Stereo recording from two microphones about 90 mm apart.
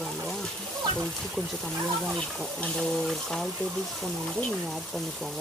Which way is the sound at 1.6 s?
5° left (ahead or behind).